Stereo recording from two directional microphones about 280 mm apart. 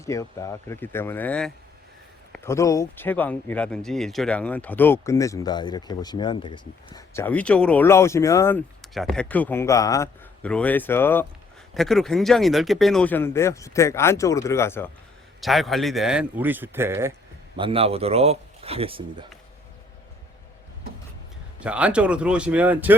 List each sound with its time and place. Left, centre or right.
0.0 s speech: centre
17.6 s speech: centre
21.6 s speech: centre